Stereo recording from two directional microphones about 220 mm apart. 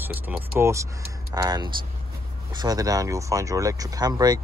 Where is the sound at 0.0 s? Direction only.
10° right (ahead or behind).